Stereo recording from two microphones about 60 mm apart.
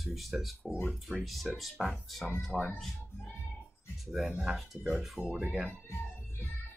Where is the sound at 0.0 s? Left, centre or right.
Centre.